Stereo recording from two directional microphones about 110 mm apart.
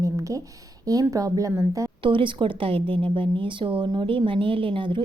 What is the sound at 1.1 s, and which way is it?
Speech, 30° right (ahead or behind).